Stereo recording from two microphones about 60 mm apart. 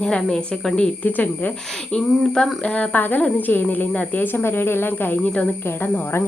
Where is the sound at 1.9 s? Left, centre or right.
Centre; by 5.3 s left.